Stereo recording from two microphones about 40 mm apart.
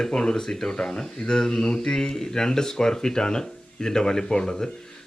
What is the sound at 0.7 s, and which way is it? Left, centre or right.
Speech, left.